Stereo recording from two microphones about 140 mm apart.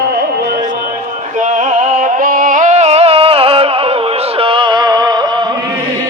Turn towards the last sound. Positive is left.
turn(degrees=-30)  # may be behind; listen again after turning